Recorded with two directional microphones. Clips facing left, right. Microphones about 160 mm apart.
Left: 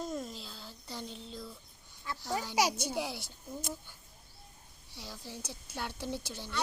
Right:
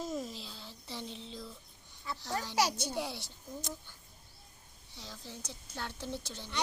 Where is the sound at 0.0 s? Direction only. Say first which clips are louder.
Even; centre (ahead or behind).